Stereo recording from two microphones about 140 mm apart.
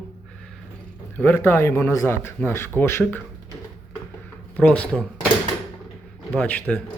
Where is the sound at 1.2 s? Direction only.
15° left (ahead or behind).